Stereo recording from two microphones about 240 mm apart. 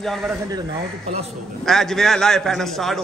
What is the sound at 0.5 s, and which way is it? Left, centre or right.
Speech, right.